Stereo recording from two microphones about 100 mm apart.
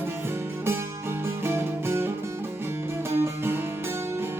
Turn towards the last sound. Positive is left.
turn(degrees=-20)  # may be behind; listen again after turning